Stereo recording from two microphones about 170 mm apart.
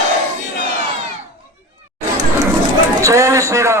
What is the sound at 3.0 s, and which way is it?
Speech, 15° right (ahead or behind).